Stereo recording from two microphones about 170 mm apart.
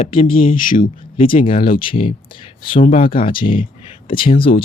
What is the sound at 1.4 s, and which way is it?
Speech, 35° left (ahead or behind).